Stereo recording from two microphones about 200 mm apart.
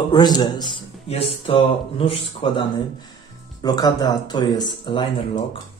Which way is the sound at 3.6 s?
20° left (ahead or behind).